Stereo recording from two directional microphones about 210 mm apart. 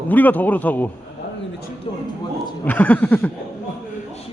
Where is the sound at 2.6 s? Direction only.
10° left (ahead or behind).